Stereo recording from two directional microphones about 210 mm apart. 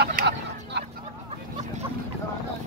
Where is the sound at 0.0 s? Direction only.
50° right (ahead or behind).